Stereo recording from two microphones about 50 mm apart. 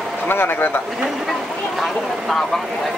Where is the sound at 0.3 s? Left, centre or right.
Left.